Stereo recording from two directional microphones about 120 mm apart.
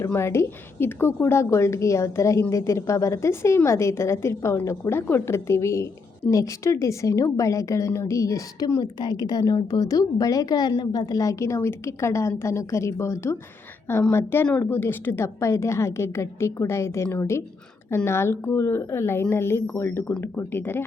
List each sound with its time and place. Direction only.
0.0 s a woman's voice: 20° left (ahead or behind)